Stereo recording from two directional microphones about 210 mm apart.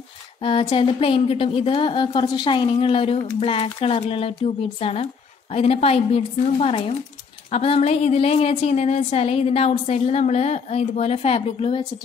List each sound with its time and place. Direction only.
0.4 s a woman's voice: 25° left (ahead or behind)